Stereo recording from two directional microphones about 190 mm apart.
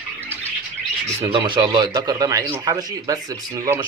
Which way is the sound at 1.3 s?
25° right (ahead or behind).